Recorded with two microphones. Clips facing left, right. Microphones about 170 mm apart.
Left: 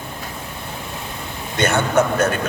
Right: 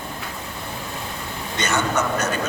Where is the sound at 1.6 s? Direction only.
55° left (ahead or behind).